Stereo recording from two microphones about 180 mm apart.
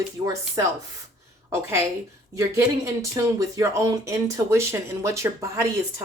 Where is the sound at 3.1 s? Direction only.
20° right (ahead or behind).